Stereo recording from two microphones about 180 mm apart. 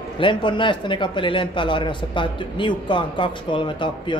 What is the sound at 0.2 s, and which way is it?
Speech, 25° left (ahead or behind).